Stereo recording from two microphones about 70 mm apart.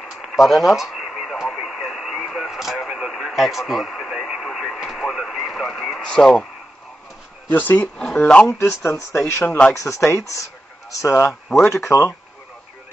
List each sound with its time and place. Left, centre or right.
0.0 s radio: centre
6.0 s speech: centre
7.4 s speech: left
7.8 s speech: centre
8.5 s speech: left